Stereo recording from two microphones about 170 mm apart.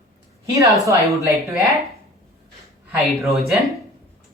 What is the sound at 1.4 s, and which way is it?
Speech, centre (ahead or behind).